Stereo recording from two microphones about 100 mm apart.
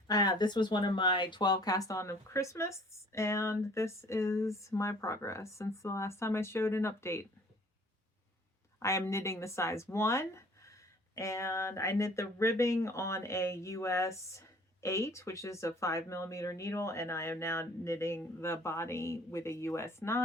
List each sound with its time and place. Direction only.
0.1 s speech: 40° left (ahead or behind)
8.8 s speech: 30° left (ahead or behind)